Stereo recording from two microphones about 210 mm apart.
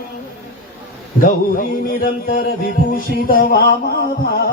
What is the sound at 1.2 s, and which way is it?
Speech, 40° left (ahead or behind).